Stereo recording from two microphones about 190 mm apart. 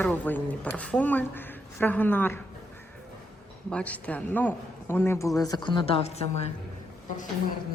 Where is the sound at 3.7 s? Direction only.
5° left (ahead or behind); by 6.5 s 35° left (ahead or behind).